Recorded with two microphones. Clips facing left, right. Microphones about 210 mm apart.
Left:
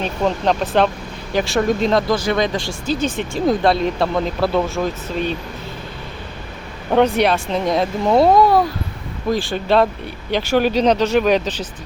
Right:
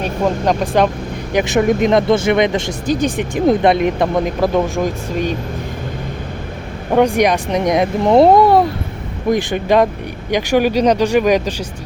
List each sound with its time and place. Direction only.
0.0 s speech: 10° right (ahead or behind)
6.9 s speech: 15° right (ahead or behind)